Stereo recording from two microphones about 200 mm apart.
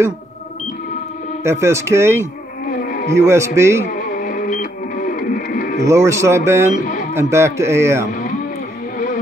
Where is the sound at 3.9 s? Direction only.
40° left (ahead or behind).